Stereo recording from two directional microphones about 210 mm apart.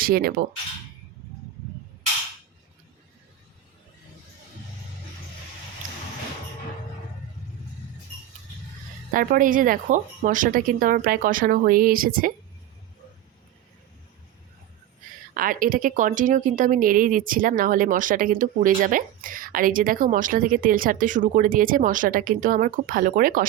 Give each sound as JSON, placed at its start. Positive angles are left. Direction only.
{"t": 0.0, "sound": "speech", "side_deg": -45}
{"t": 9.1, "sound": "a woman's voice", "side_deg": -40}
{"t": 15.4, "sound": "a woman's voice", "side_deg": -40}